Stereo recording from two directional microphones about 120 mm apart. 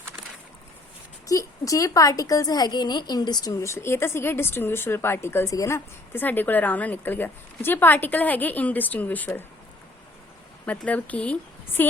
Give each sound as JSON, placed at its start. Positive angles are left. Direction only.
{"t": 1.3, "sound": "a woman's voice", "side_deg": 30}
{"t": 10.7, "sound": "speech", "side_deg": 10}